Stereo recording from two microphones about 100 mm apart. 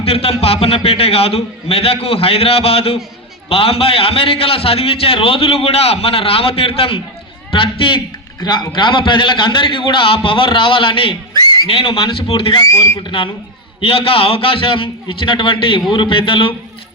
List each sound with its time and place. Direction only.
0.0 s a man's voice: 80° left; by 12.5 s 60° left (ahead or behind)
12.5 s speech: 35° left (ahead or behind)
13.0 s a man's voice: 55° left (ahead or behind)
13.8 s a man's voice: 70° left (ahead or behind)